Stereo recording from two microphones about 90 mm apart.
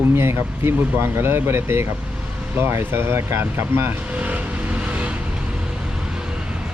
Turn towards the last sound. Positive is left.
turn(degrees=-15)  # may be behind; listen again after turning